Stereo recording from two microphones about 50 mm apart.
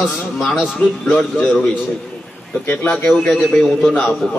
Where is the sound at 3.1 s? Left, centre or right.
Left.